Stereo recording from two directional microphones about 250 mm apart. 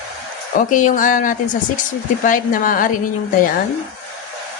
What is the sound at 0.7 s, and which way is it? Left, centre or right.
Speech, left.